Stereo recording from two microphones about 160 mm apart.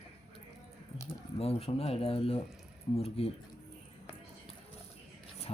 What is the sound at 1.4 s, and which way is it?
Speech, 40° left (ahead or behind).